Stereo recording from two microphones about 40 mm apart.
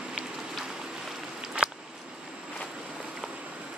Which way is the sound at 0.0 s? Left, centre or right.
Centre.